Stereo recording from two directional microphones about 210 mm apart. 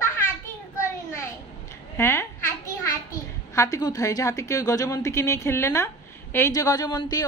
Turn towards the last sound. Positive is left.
turn(degrees=20)  # may be behind; listen again after turning